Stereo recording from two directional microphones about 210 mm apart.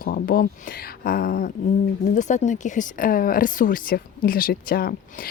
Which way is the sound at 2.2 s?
35° left (ahead or behind).